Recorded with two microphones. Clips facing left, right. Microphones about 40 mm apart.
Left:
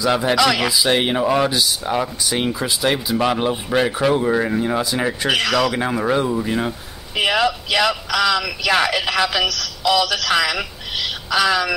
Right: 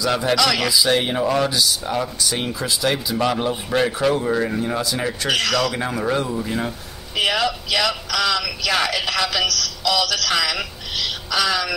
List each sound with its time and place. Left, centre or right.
0.0 s speech: centre